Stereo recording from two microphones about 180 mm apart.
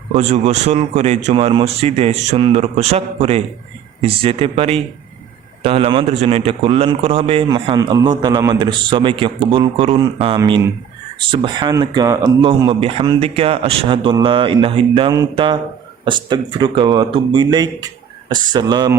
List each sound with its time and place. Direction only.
0.2 s a man's voice: 35° right (ahead or behind)